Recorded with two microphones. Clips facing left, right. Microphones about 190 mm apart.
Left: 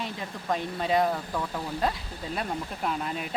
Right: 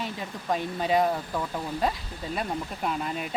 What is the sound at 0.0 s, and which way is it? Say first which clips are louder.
Speech: right 1 dB; centre (ahead or behind).